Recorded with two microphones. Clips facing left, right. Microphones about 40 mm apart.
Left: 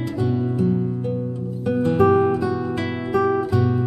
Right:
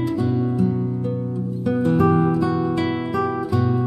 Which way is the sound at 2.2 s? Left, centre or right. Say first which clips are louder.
Right 1 dB; centre.